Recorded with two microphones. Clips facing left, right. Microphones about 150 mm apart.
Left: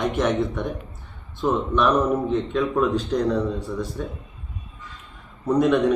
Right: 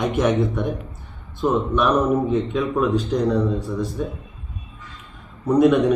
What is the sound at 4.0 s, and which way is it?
Speech, 10° right (ahead or behind).